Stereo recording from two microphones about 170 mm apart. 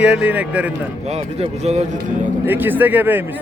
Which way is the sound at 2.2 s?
10° right (ahead or behind).